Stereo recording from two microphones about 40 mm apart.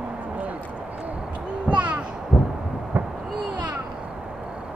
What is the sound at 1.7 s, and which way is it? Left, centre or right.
Heart sounds, right.